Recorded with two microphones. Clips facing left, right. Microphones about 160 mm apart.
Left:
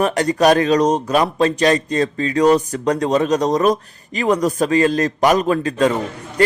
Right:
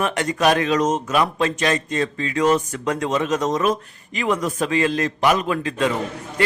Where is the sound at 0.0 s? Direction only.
35° left (ahead or behind).